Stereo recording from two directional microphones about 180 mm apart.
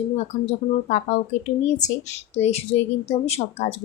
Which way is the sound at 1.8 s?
40° left (ahead or behind).